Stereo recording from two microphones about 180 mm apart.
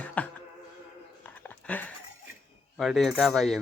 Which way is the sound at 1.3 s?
10° left (ahead or behind).